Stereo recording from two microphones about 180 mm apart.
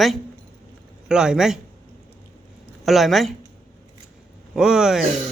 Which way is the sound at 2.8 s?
Centre (ahead or behind).